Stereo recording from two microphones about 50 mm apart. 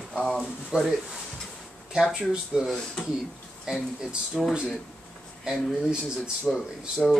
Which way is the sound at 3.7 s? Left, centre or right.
Centre.